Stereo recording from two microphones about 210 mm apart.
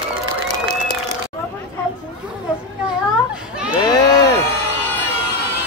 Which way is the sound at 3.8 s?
20° left (ahead or behind).